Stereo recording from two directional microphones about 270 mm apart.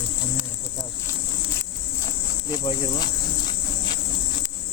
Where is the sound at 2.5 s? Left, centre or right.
Centre.